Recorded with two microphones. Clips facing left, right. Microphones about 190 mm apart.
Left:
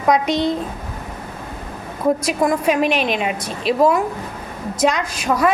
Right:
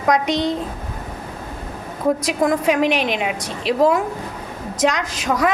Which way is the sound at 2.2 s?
15° right (ahead or behind).